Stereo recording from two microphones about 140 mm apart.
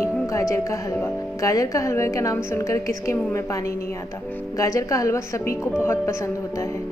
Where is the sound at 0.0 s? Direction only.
20° left (ahead or behind).